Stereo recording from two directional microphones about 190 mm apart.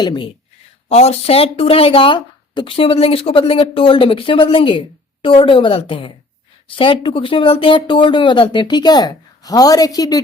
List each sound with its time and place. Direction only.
0.0 s speech: 25° left (ahead or behind)